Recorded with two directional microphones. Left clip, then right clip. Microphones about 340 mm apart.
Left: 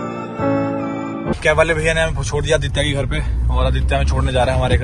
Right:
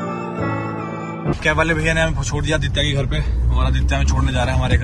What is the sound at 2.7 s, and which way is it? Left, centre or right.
Speech, left.